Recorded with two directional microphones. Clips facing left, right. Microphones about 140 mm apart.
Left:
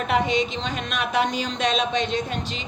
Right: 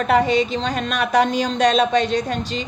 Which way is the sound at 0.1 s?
40° right (ahead or behind).